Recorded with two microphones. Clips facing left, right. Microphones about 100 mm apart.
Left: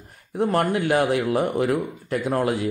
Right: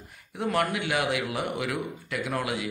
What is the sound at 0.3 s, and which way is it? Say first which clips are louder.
Speech: left 6 dB; 40° left (ahead or behind).